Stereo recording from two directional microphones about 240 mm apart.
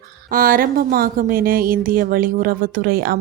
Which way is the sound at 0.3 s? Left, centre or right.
Right.